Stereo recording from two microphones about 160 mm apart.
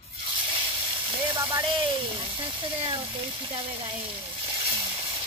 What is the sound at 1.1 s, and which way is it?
Speech, 20° right (ahead or behind).